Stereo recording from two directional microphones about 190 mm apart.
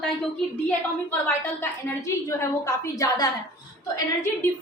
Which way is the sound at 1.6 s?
15° left (ahead or behind).